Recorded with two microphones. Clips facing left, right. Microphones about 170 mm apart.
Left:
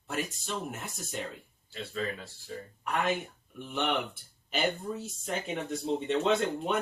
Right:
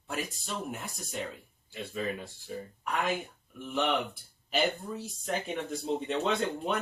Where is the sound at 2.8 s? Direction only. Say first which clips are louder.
Left 2 dB; centre (ahead or behind).